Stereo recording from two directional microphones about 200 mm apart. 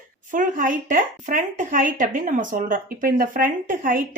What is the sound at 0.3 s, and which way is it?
A woman's voice, 40° right (ahead or behind).